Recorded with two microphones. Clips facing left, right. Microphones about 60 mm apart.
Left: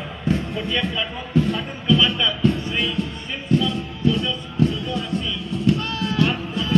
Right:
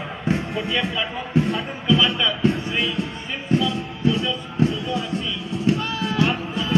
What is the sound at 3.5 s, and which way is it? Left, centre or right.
Music, right.